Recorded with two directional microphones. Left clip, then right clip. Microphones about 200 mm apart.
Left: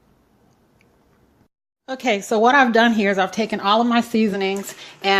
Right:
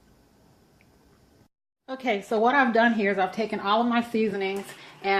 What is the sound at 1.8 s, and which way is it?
Speech, 40° left (ahead or behind).